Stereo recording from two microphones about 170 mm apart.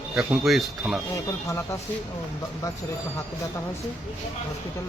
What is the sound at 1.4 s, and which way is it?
Speech, 15° left (ahead or behind).